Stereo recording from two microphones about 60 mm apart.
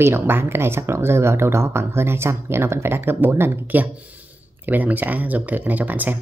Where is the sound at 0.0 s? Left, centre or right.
Right.